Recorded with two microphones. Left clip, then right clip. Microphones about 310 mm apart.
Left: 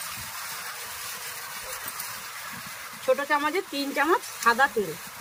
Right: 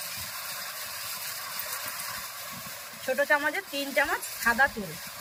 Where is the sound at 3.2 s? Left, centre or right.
Centre.